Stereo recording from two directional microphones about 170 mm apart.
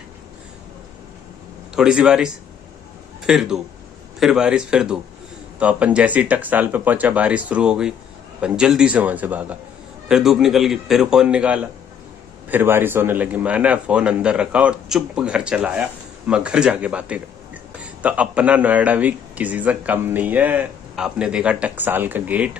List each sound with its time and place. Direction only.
1.8 s a man's voice: 5° right (ahead or behind)